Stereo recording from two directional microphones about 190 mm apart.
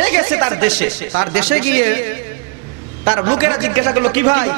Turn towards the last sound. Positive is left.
turn(degrees=-15)  # may be behind; listen again after turning